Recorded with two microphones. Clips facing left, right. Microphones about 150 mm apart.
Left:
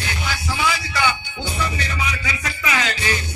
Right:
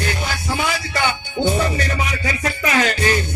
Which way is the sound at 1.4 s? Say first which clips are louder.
Right 8 dB; 45° right (ahead or behind).